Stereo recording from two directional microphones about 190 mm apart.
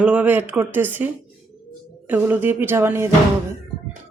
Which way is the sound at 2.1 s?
10° right (ahead or behind).